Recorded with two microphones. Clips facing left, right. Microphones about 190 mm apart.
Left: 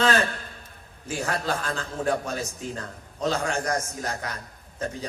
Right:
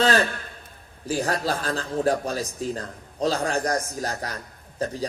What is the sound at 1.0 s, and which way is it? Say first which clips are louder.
A man's voice: right 3 dB; 35° right (ahead or behind).